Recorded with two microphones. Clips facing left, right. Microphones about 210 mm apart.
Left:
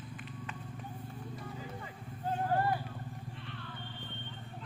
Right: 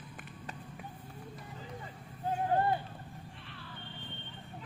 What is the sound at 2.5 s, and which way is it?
Vehicle, 20° right (ahead or behind).